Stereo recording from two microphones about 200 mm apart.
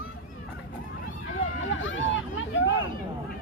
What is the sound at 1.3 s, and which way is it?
Vehicle, 70° left (ahead or behind).